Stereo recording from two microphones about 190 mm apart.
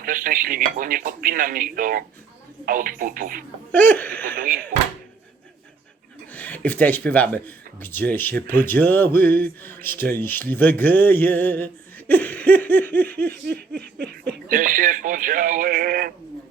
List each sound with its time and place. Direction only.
0.0 s speech: 45° right (ahead or behind)
3.7 s speech: 10° left (ahead or behind)
4.4 s speech: 45° right (ahead or behind)
6.3 s speech: 10° left (ahead or behind)
13.5 s snicker: 60° right (ahead or behind)
14.5 s speech: 45° right (ahead or behind)